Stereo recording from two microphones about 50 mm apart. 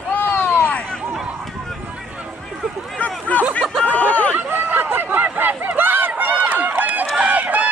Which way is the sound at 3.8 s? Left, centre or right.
Left.